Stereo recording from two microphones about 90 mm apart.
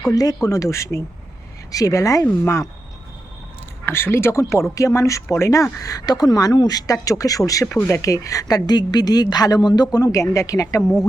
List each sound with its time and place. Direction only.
0.1 s a woman's voice: 45° left (ahead or behind)
3.8 s speech: 25° left (ahead or behind)
7.7 s speech: 25° left (ahead or behind)
8.0 s a woman's voice: 35° left (ahead or behind)